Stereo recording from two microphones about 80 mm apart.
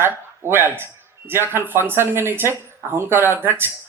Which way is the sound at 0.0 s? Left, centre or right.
Right.